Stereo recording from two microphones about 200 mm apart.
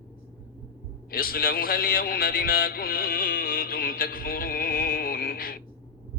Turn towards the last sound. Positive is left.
turn(degrees=45)  # may be behind; listen again after turning